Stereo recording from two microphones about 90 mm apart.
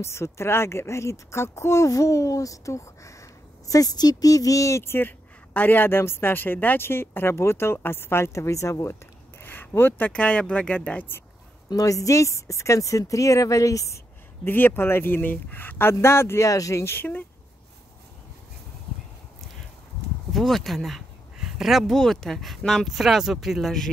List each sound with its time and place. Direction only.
0.0 s speech: 30° left (ahead or behind)
9.4 s speech: 20° left (ahead or behind)
11.7 s speech: 40° left (ahead or behind); by 17.3 s 20° left (ahead or behind)
20.3 s speech: centre (ahead or behind)